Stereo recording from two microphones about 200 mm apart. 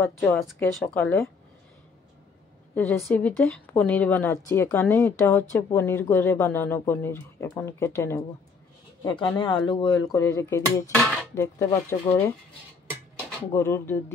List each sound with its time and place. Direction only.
0.0 s speech: centre (ahead or behind)
2.7 s a woman's voice: 10° left (ahead or behind)
9.2 s speech: 25° left (ahead or behind)